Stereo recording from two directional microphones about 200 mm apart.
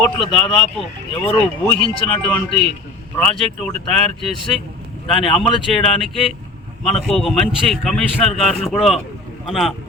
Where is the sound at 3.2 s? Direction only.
5° left (ahead or behind).